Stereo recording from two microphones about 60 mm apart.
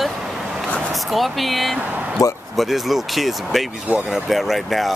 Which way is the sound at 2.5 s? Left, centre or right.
Centre.